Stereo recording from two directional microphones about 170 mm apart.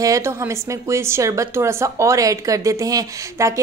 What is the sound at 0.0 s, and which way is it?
A woman's voice, 15° right (ahead or behind).